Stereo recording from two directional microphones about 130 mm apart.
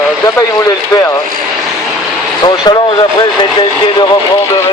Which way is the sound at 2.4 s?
35° left (ahead or behind).